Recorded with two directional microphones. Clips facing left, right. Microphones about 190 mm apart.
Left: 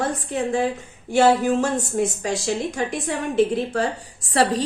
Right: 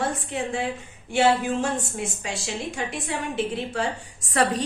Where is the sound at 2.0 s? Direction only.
40° left (ahead or behind).